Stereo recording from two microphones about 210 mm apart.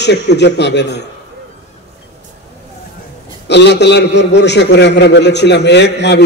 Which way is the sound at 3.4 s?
55° left (ahead or behind).